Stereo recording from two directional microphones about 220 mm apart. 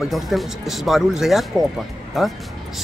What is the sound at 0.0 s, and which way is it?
Speech, centre (ahead or behind).